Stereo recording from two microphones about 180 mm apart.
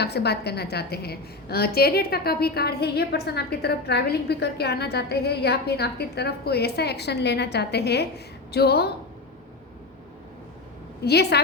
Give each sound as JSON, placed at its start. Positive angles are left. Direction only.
{"t": 0.0, "sound": "a woman's voice", "side_deg": 65}
{"t": 11.0, "sound": "a woman's voice", "side_deg": 65}